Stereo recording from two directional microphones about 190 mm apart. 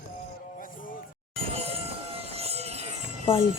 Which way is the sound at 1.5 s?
30° right (ahead or behind).